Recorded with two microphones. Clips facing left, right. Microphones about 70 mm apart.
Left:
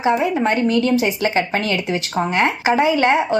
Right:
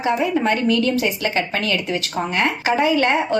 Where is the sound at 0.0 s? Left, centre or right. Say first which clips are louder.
Left 2 dB; left.